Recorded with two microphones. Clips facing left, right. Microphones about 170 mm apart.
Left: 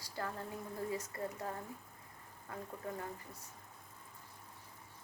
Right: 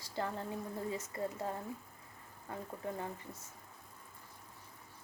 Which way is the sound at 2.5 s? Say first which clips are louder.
Right 2 dB; 25° right (ahead or behind).